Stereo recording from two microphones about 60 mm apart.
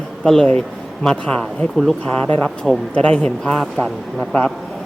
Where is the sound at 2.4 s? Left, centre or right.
Centre.